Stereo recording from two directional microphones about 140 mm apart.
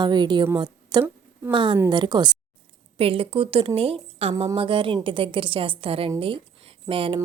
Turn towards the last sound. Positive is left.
turn(degrees=-40)  # may be behind; listen again after turning